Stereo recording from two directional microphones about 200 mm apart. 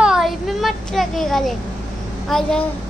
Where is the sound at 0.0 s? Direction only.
Centre (ahead or behind).